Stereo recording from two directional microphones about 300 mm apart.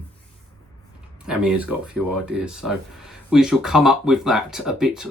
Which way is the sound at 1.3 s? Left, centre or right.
Centre.